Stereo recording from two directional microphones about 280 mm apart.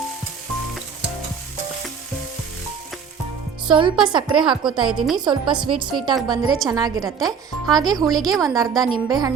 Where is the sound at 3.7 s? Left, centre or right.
Centre.